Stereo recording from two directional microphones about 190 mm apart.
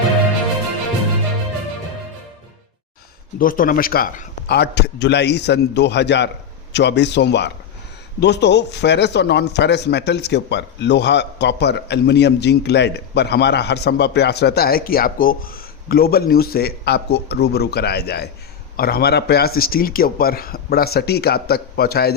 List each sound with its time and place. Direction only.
3.3 s speech: 45° left (ahead or behind)